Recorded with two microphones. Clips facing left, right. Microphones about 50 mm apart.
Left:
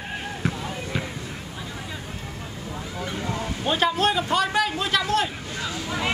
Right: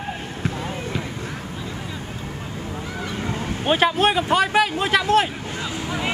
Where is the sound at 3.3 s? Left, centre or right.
Right.